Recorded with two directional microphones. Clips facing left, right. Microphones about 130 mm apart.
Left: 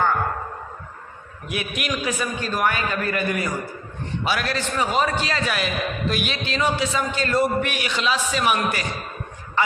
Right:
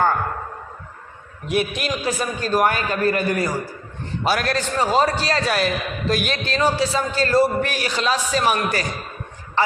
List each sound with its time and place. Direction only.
1.5 s a man's voice: 35° right (ahead or behind)